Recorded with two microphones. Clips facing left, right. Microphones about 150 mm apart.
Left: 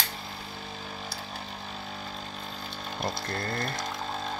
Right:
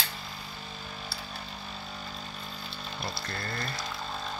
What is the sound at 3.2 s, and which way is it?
Speech, 50° left (ahead or behind).